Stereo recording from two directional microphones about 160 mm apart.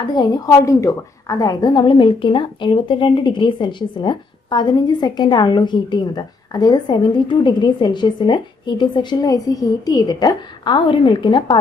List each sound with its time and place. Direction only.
0.0 s a woman's voice: 25° left (ahead or behind)